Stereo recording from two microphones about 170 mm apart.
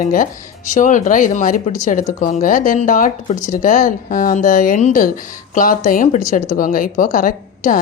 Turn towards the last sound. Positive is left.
turn(degrees=55)  # may be behind; listen again after turning